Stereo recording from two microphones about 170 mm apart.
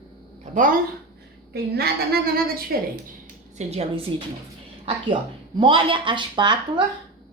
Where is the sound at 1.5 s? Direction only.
65° right (ahead or behind).